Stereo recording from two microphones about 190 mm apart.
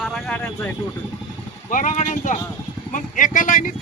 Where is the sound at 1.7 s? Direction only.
45° left (ahead or behind).